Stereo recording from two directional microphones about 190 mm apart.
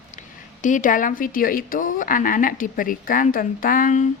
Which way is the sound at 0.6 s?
45° left (ahead or behind).